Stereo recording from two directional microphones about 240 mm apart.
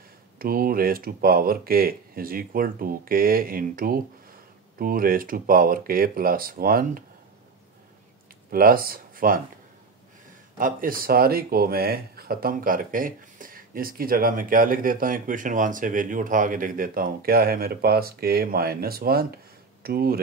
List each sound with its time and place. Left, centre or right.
0.4 s speech: right
8.5 s speech: right
10.6 s speech: right